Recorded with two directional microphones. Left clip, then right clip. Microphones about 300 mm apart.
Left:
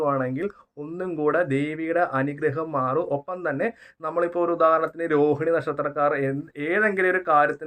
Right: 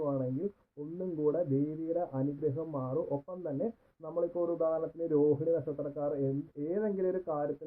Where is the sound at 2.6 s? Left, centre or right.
Left.